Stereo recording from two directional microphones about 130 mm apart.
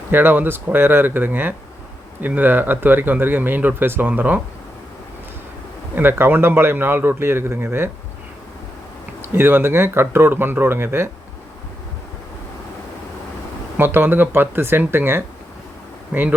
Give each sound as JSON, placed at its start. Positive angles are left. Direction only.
{"t": 0.1, "sound": "speech", "side_deg": -15}
{"t": 5.9, "sound": "speech", "side_deg": -15}
{"t": 9.3, "sound": "speech", "side_deg": -15}
{"t": 13.7, "sound": "speech", "side_deg": -15}